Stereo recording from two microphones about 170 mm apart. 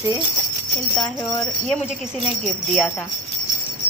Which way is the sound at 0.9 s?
5° left (ahead or behind).